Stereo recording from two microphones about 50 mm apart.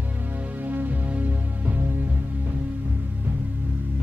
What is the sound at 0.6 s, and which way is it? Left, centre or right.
Music, right.